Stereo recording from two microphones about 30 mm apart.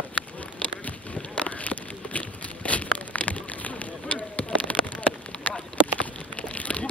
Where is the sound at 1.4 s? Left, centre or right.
Left.